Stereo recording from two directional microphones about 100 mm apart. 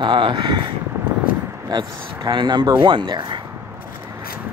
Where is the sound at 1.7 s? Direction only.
45° right (ahead or behind).